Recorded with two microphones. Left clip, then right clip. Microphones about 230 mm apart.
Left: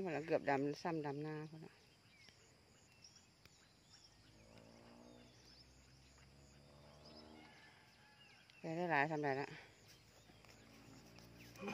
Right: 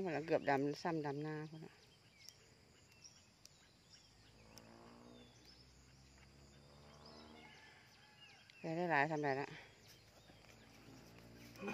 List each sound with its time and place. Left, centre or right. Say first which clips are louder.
0.0 s speech: right 1 dB; centre
8.6 s speech: right 1 dB; centre
11.6 s pig: right 1 dB; centre